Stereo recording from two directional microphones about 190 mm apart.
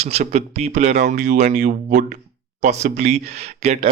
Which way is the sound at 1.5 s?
40° right (ahead or behind).